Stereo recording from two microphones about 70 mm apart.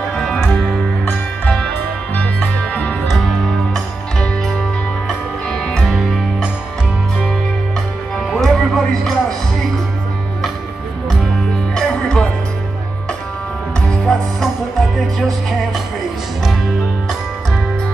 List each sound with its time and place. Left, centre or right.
0.1 s music: centre
5.0 s music: centre
5.9 s music: centre
8.4 s music: centre
11.7 s music: centre
13.7 s music: centre